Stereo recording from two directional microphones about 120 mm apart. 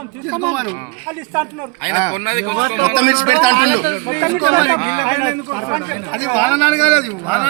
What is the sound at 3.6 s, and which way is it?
Speech, 30° right (ahead or behind).